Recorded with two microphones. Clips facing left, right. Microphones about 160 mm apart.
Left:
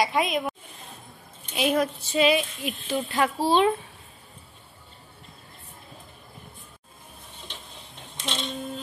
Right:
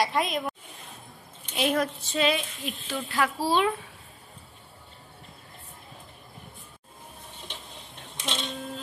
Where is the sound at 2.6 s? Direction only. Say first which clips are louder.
Left 5 dB; 20° left (ahead or behind).